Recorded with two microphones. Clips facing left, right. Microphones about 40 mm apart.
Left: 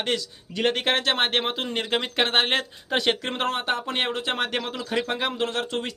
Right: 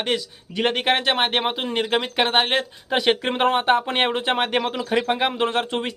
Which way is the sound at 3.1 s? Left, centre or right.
Right.